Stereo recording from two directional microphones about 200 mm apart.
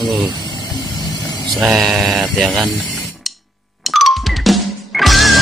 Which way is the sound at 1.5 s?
Centre (ahead or behind).